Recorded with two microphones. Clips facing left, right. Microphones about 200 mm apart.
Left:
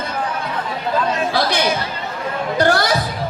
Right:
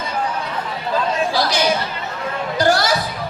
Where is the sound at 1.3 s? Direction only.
55° left (ahead or behind).